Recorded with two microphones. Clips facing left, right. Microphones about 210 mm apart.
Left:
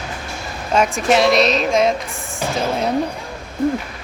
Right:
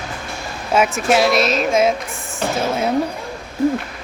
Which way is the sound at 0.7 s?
Centre (ahead or behind).